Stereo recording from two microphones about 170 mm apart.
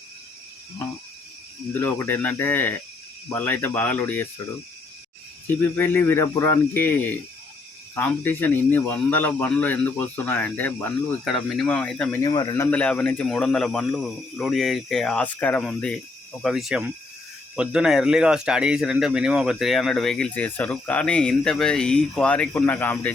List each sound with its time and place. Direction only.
1.8 s speech: 10° left (ahead or behind)
5.7 s speech: 10° left (ahead or behind)
12.1 s speech: 25° left (ahead or behind)
12.7 s speech: 5° left (ahead or behind)